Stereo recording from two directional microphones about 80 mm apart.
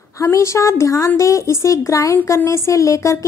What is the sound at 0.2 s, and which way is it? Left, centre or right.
A woman's voice, left.